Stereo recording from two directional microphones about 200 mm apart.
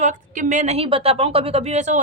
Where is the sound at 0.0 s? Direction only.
40° right (ahead or behind).